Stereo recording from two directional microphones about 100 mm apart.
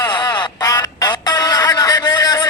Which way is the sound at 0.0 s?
45° left (ahead or behind).